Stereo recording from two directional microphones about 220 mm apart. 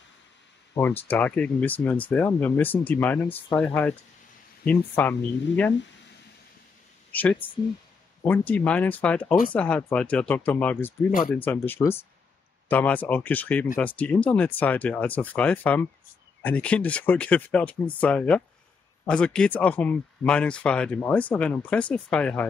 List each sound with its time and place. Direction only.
1.0 s speech: 5° left (ahead or behind)
7.1 s speech: 5° left (ahead or behind)
11.1 s speech: 40° left (ahead or behind)
11.3 s speech: 10° left (ahead or behind)